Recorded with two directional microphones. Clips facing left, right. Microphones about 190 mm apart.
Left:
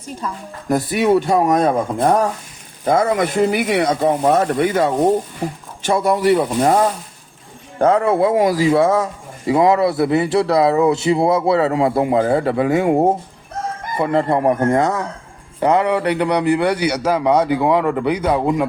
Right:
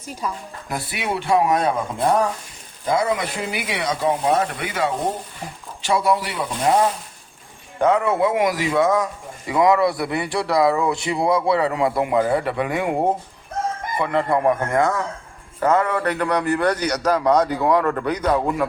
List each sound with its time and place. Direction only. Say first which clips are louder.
0.0 s a woman's voice: left 1 dB; 10° right (ahead or behind)
0.7 s speech: left 11 dB; 40° left (ahead or behind)
7.8 s speech: left 4 dB; 35° left (ahead or behind)
15.6 s a man's voice: left 3 dB; 15° left (ahead or behind)